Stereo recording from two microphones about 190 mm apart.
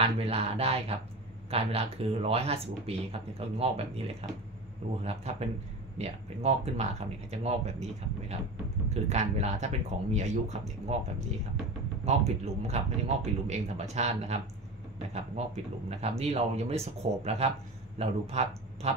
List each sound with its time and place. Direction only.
0.0 s speech: 30° right (ahead or behind)
12.1 s speech: 35° right (ahead or behind)